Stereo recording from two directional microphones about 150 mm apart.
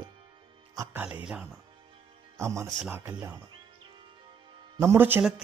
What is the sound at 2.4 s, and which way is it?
Speech, 20° right (ahead or behind).